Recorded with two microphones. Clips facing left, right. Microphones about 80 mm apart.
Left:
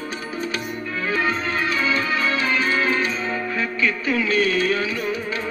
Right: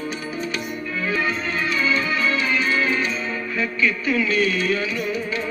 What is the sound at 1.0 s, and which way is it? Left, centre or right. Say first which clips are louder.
Music: left 1 dB; left.